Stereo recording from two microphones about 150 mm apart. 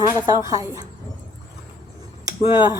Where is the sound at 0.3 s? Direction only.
20° right (ahead or behind).